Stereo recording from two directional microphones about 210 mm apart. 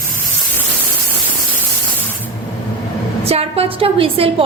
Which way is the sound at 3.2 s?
30° right (ahead or behind).